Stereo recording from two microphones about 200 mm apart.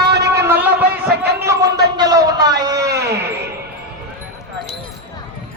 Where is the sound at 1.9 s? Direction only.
20° right (ahead or behind).